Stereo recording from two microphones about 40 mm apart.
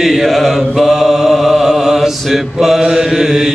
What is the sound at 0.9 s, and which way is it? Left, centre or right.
Mantra, centre.